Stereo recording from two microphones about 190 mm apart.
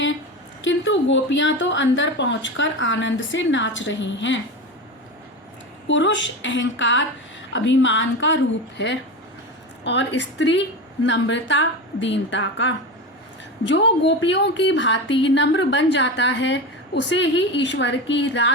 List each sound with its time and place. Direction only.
0.6 s a woman's voice: 75° left (ahead or behind)
5.9 s a woman's voice: 75° left (ahead or behind)
9.8 s a woman's voice: 70° left (ahead or behind)